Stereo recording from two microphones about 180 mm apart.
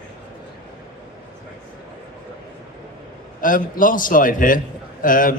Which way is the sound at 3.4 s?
50° left (ahead or behind).